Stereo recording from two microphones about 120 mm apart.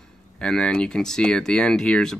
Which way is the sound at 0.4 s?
5° left (ahead or behind).